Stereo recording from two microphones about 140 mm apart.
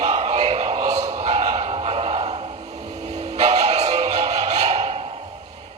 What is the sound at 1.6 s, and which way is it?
Music, 45° right (ahead or behind).